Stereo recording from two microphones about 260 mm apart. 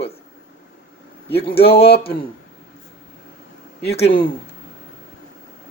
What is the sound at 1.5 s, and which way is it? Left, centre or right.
Speech, left.